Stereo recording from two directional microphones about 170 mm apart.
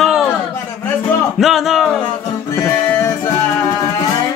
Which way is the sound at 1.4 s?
Centre (ahead or behind).